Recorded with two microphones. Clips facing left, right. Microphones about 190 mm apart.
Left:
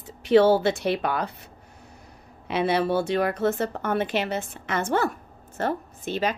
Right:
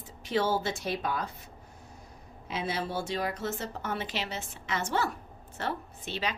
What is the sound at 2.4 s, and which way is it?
A woman's voice, 65° left (ahead or behind).